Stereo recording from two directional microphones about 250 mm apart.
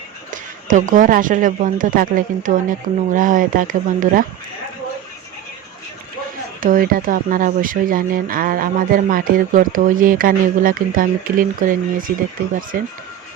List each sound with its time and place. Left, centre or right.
0.3 s speech: right
6.6 s speech: right